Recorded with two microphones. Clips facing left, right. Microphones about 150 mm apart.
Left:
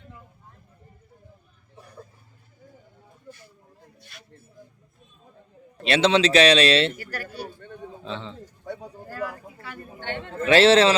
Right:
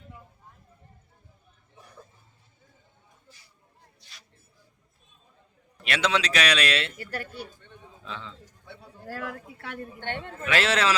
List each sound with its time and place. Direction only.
3.2 s a sound: 50° left (ahead or behind)
5.8 s speech: 30° left (ahead or behind)
6.9 s speech: 25° right (ahead or behind)
7.4 s a sound: 55° left (ahead or behind)
8.0 s speech: 30° left (ahead or behind)
8.4 s bird: 45° left (ahead or behind)
9.0 s a man's voice: 75° right (ahead or behind)
10.4 s speech: 30° left (ahead or behind)